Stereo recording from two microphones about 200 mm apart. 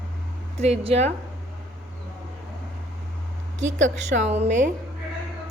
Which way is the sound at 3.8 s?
35° right (ahead or behind).